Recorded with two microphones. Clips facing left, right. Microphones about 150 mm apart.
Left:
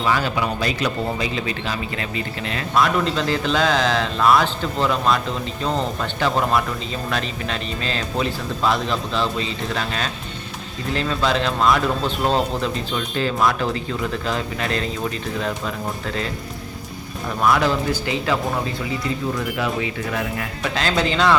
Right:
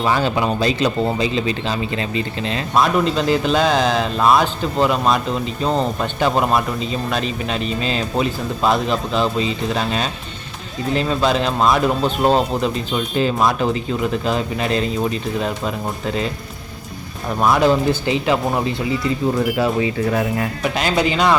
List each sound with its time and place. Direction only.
0.0 s speech: 25° right (ahead or behind)
17.4 s speech: 20° right (ahead or behind)
20.7 s speech: 15° right (ahead or behind)